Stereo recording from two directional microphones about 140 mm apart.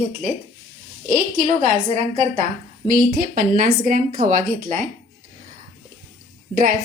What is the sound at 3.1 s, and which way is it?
A woman's voice, 90° right.